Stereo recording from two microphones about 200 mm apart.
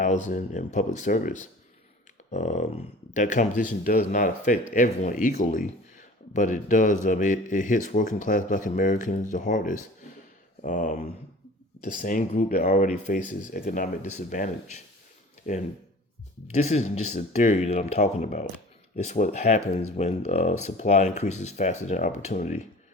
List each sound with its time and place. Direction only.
0.0 s speech: 40° left (ahead or behind)